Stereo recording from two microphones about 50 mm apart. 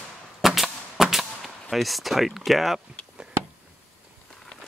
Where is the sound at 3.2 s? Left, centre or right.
Centre.